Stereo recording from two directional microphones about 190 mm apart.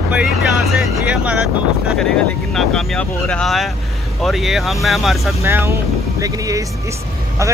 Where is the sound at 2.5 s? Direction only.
5° left (ahead or behind).